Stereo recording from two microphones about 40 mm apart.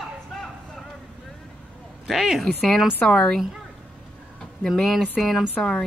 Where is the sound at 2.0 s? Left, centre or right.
Centre.